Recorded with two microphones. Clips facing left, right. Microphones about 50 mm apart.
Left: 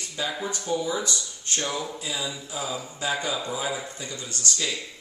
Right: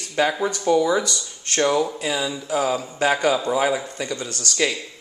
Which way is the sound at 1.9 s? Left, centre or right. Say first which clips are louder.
Right 7 dB; right.